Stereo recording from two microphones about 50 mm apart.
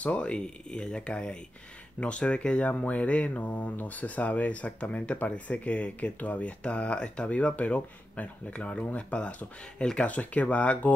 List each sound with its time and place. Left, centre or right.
0.0 s speech: left